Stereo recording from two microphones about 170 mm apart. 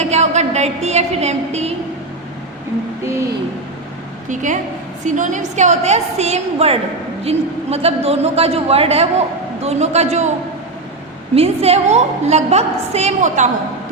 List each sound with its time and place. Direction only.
0.0 s a woman's voice: 40° right (ahead or behind)
3.0 s speech: 15° right (ahead or behind)
5.0 s a woman's voice: 45° right (ahead or behind)
11.3 s a woman's voice: 35° right (ahead or behind)